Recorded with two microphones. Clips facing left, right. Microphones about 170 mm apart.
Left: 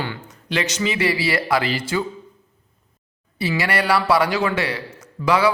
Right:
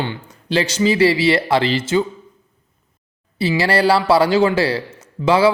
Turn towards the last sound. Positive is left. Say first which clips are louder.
# right 4 dB
turn(degrees=-30)  # may be behind; listen again after turning